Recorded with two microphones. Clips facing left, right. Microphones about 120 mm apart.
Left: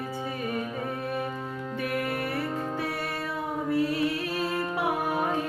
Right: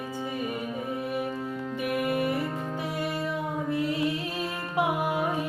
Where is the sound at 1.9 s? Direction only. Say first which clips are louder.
Right 4 dB; 15° right (ahead or behind).